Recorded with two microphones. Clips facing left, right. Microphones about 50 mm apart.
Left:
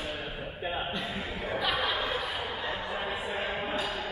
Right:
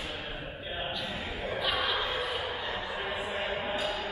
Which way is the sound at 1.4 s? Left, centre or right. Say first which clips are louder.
Left 1 dB; centre.